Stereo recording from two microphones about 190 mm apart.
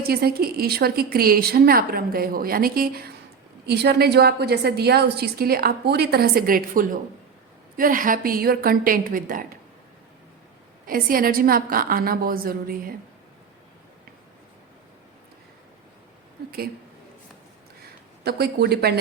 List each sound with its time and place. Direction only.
0.0 s a woman's voice: 55° right (ahead or behind)
10.8 s a woman's voice: 50° right (ahead or behind)
18.2 s a woman's voice: 55° right (ahead or behind)